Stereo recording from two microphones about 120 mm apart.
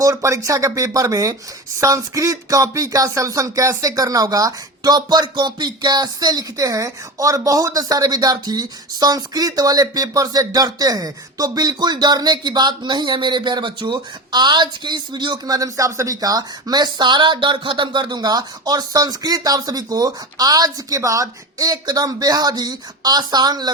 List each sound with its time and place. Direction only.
0.0 s speech: 25° right (ahead or behind)